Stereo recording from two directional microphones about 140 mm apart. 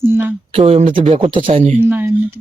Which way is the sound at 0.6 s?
55° right (ahead or behind).